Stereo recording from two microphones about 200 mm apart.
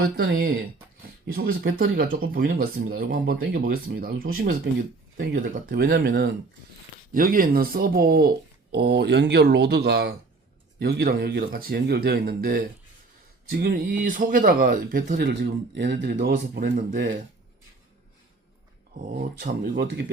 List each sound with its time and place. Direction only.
0.0 s speech: 45° right (ahead or behind)
5.1 s speech: 55° right (ahead or behind)
15.3 s speech: 60° right (ahead or behind)
19.4 s speech: 55° right (ahead or behind)